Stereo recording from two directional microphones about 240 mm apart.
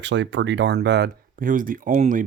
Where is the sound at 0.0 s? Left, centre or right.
Right.